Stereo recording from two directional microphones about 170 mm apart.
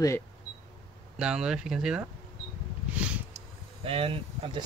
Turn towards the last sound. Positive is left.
turn(degrees=-35)  # may be behind; listen again after turning